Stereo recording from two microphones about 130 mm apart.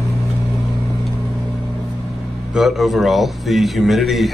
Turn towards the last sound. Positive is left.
turn(degrees=0)  # may be behind; listen again after turning